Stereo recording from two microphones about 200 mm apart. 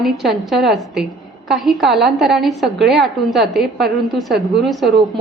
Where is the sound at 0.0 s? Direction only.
Centre (ahead or behind).